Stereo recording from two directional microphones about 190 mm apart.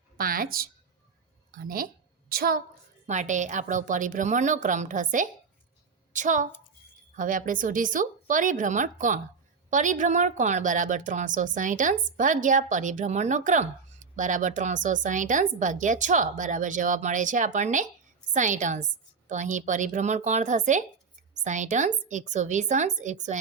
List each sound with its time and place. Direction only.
0.2 s a woman's voice: 50° right (ahead or behind)
3.1 s a woman's voice: 40° right (ahead or behind)